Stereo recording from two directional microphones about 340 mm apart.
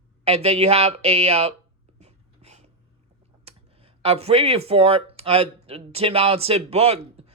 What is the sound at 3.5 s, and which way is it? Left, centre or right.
Speech, centre.